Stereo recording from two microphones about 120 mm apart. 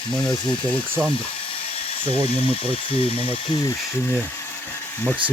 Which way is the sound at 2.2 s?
50° left (ahead or behind).